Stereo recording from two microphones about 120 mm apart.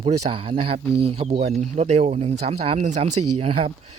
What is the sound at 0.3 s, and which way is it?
Speech, 50° right (ahead or behind).